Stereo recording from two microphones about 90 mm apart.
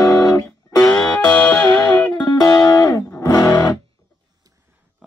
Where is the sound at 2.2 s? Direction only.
50° left (ahead or behind).